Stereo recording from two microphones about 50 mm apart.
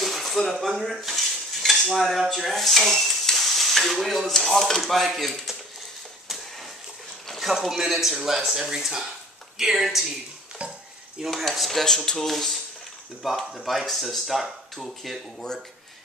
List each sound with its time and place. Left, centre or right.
0.0 s dishes: centre
2.1 s speech: centre
7.2 s speech: centre
10.6 s dishes: right
11.2 s speech: centre